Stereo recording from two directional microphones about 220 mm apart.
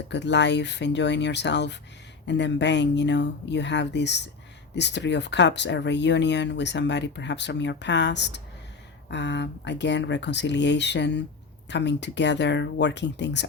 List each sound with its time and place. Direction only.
0.1 s speech: 50° left (ahead or behind)